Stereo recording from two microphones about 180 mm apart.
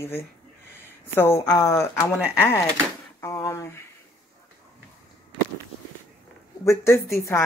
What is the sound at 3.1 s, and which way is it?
Speech, 15° left (ahead or behind).